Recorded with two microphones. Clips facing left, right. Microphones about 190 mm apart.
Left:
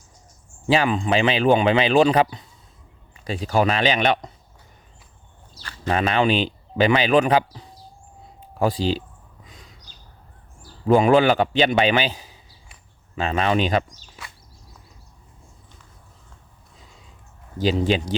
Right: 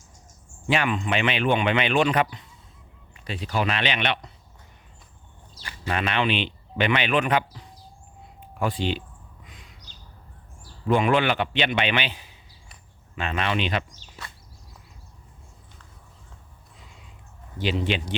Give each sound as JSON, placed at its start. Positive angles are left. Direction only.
{"t": 0.7, "sound": "speech", "side_deg": 35}
{"t": 5.9, "sound": "speech", "side_deg": 40}
{"t": 9.5, "sound": "a sound", "side_deg": 35}
{"t": 10.8, "sound": "speech", "side_deg": 40}
{"t": 17.6, "sound": "speech", "side_deg": 40}